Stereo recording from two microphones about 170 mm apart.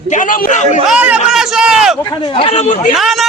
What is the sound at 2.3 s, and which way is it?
Speech, 35° left (ahead or behind).